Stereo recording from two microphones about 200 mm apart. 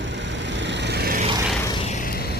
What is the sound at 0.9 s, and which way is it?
Vehicle, 50° right (ahead or behind).